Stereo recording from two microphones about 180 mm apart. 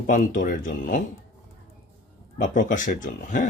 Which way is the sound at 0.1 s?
45° left (ahead or behind).